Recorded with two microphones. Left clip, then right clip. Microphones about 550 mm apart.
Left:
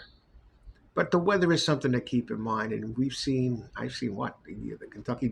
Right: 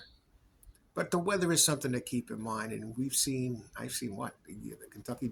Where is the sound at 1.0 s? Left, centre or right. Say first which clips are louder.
Left 7 dB; right.